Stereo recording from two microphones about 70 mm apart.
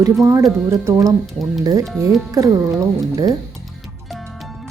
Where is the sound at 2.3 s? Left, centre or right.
Right.